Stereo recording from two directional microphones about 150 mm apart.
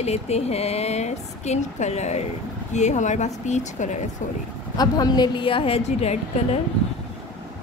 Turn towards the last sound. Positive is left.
turn(degrees=45)  # may be behind; listen again after turning